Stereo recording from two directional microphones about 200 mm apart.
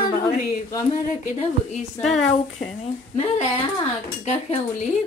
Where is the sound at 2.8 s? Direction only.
35° left (ahead or behind).